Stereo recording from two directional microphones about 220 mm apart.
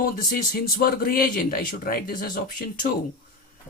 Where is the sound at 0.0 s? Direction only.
40° left (ahead or behind).